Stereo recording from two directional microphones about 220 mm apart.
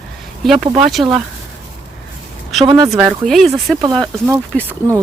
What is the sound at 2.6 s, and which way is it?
Speech, 20° right (ahead or behind).